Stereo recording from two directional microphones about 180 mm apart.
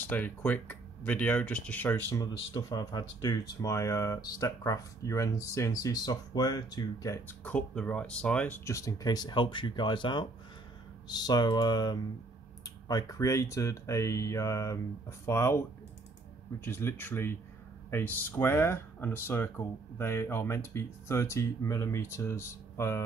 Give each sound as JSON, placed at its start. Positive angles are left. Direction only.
{"t": 0.0, "sound": "speech", "side_deg": 10}
{"t": 16.6, "sound": "speech", "side_deg": 15}